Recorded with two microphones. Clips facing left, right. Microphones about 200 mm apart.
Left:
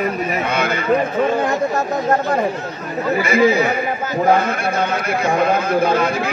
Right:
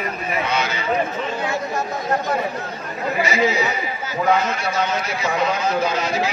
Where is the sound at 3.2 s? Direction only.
55° left (ahead or behind).